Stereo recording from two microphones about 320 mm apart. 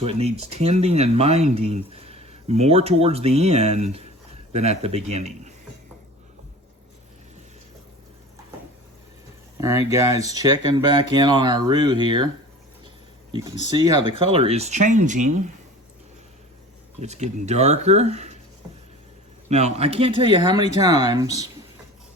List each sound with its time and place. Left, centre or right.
0.0 s speech: centre
9.6 s speech: centre
13.7 s speech: centre
17.0 s speech: right
19.5 s speech: right